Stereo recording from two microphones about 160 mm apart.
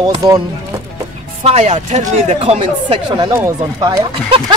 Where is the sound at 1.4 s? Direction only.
40° right (ahead or behind).